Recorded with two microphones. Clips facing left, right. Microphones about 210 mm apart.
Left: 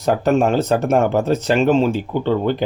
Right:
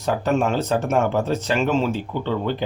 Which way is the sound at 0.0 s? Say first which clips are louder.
Left 5 dB; 40° left (ahead or behind).